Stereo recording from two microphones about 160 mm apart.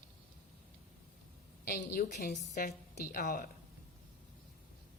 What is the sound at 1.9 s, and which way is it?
Speech, 90° left.